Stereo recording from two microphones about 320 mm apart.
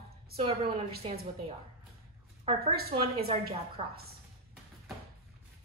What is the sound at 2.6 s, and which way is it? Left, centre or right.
A woman's voice, centre.